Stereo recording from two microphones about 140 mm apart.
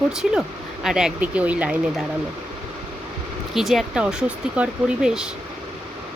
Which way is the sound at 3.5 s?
Centre (ahead or behind).